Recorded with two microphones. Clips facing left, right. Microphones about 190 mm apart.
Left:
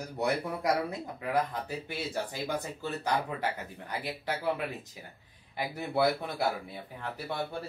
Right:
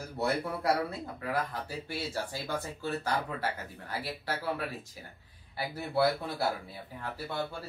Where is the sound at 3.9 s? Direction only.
20° left (ahead or behind).